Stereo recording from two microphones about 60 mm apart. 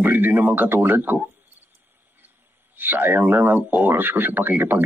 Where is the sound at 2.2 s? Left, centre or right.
Right.